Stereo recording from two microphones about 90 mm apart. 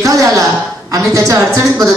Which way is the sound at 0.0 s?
40° right (ahead or behind).